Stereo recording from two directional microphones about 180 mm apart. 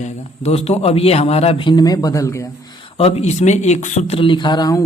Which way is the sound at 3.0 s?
35° left (ahead or behind).